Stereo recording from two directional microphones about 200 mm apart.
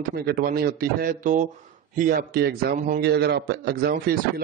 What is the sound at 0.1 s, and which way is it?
A man's voice, 50° right (ahead or behind).